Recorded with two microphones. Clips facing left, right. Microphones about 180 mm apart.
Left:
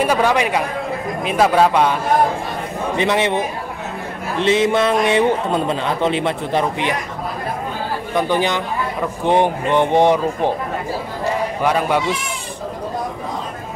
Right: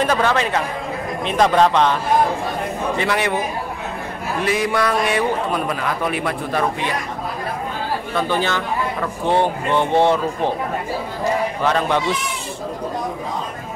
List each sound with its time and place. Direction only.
0.0 s a man's voice: 10° left (ahead or behind)
3.0 s a man's voice: 20° left (ahead or behind)
8.1 s a man's voice: 15° left (ahead or behind)
11.6 s a man's voice: 10° left (ahead or behind)